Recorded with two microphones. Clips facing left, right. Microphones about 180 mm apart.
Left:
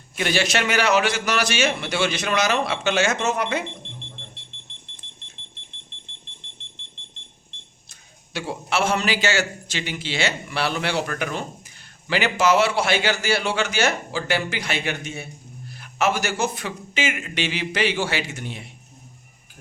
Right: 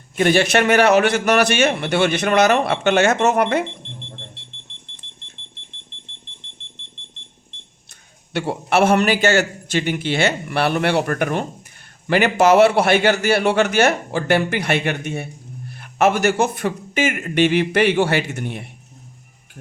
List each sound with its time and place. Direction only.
0.2 s a man's voice: 55° right (ahead or behind)
8.3 s a man's voice: 60° right (ahead or behind)